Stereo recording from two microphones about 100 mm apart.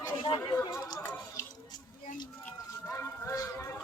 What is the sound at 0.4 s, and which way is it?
Speech, 45° left (ahead or behind).